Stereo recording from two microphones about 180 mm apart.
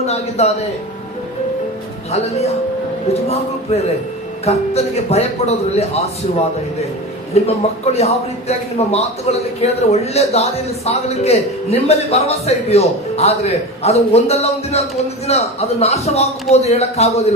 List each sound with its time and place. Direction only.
0.0 s a man's voice: 35° left (ahead or behind)
4.4 s a man's voice: 35° left (ahead or behind)
7.4 s a man's voice: 35° left (ahead or behind)